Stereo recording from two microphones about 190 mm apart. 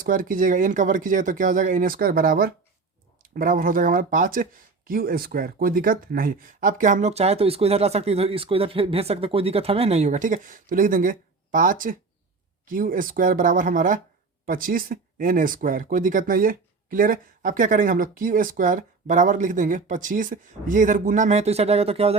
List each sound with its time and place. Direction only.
0.0 s speech: 45° right (ahead or behind)